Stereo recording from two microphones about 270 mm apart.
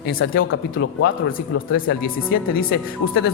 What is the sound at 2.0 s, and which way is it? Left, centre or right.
Speech, left.